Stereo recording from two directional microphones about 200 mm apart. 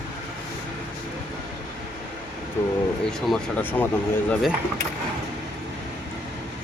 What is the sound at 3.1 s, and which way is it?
Speech, centre (ahead or behind).